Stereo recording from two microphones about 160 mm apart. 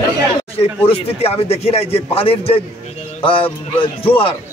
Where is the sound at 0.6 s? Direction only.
40° left (ahead or behind).